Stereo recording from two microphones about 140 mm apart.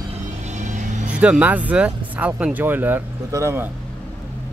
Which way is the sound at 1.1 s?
10° right (ahead or behind).